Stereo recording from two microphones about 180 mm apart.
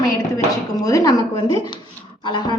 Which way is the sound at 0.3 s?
20° left (ahead or behind).